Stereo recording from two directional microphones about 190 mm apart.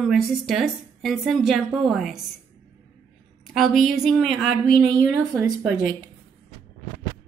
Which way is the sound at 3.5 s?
Centre (ahead or behind).